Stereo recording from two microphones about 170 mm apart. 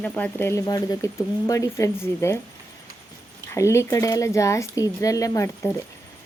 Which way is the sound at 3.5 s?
15° left (ahead or behind).